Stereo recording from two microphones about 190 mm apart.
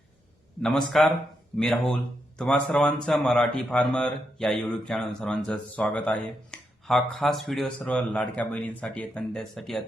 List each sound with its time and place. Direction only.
0.6 s speech: centre (ahead or behind)